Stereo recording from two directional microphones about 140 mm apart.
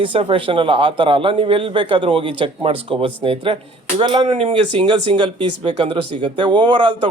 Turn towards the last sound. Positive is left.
turn(degrees=-35)  # may be behind; listen again after turning